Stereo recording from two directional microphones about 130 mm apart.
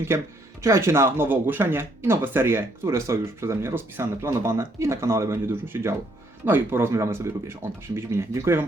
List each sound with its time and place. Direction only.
0.6 s speech: 20° right (ahead or behind)